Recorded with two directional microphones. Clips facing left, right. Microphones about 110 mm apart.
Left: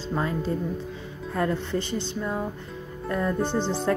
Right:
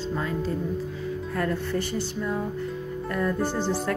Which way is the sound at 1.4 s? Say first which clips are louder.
Left 2 dB; 20° left (ahead or behind).